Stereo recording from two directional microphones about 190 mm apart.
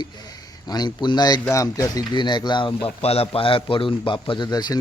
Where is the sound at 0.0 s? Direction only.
20° left (ahead or behind).